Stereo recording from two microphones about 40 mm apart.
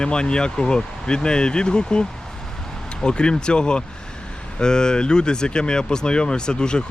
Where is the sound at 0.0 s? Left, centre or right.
Left.